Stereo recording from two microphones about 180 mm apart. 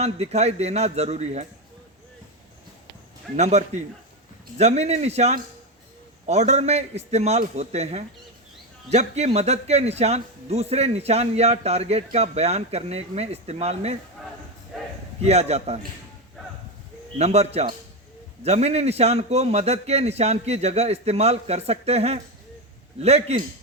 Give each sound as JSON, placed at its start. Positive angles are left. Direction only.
{"t": 0.0, "sound": "a man's voice", "side_deg": -35}
{"t": 3.3, "sound": "a man's voice", "side_deg": -40}
{"t": 15.2, "sound": "a man's voice", "side_deg": -35}
{"t": 17.2, "sound": "a man's voice", "side_deg": -35}